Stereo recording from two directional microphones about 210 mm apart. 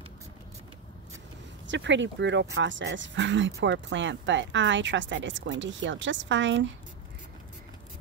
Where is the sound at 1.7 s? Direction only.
60° right (ahead or behind).